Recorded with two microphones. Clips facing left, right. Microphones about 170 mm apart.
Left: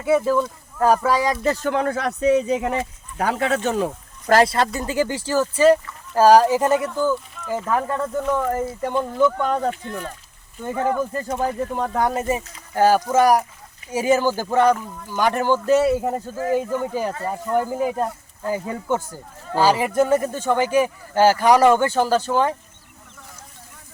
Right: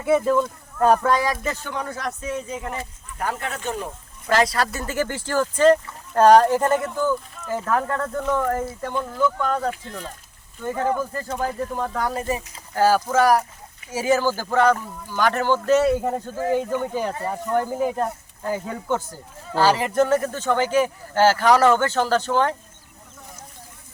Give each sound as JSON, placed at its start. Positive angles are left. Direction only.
{"t": 0.0, "sound": "speech", "side_deg": 0}
{"t": 1.7, "sound": "speech", "side_deg": 70}
{"t": 4.4, "sound": "speech", "side_deg": 25}
{"t": 9.8, "sound": "speech", "side_deg": 60}
{"t": 10.6, "sound": "speech", "side_deg": 15}